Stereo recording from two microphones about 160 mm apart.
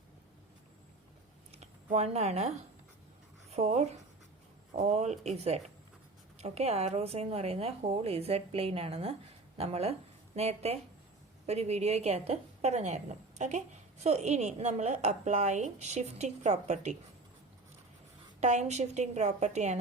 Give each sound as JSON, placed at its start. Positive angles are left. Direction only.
{"t": 1.5, "sound": "a sound", "side_deg": -40}
{"t": 3.5, "sound": "a woman's voice", "side_deg": -40}
{"t": 18.3, "sound": "speech", "side_deg": -45}